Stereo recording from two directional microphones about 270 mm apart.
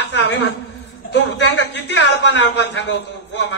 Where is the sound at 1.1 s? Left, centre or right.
Left.